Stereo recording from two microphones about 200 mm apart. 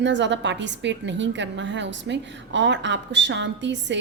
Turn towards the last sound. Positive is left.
turn(degrees=-60)  # may be behind; listen again after turning